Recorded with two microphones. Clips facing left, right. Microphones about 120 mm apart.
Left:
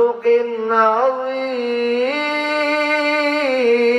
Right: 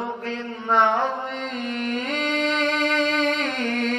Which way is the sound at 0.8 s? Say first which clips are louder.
Left 5 dB; 40° left (ahead or behind).